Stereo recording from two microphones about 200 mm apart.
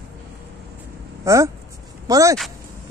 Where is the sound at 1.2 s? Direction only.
15° right (ahead or behind).